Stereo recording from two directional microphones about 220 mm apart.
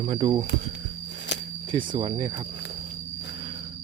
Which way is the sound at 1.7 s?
20° right (ahead or behind).